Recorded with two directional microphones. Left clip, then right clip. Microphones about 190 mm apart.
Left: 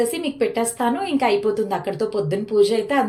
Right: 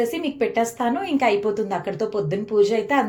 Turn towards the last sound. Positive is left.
turn(degrees=5)  # may be behind; listen again after turning